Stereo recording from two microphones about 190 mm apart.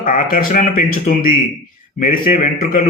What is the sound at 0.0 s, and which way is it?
Speech, 45° left (ahead or behind).